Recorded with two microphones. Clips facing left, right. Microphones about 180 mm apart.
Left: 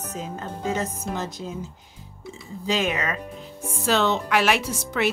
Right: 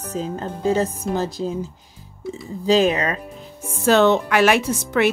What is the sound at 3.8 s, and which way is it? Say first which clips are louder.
Speech: right 7 dB; 50° right (ahead or behind).